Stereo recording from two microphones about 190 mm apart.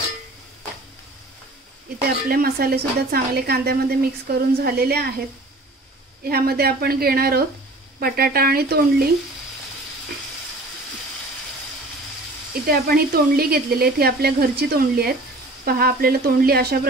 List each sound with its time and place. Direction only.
2.0 s a woman's voice: 50° right (ahead or behind)
6.2 s speech: 55° right (ahead or behind)
12.6 s speech: 55° right (ahead or behind)